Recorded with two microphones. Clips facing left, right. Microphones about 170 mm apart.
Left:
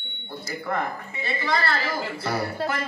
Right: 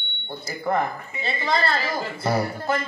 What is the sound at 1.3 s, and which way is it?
A man's voice, 20° right (ahead or behind).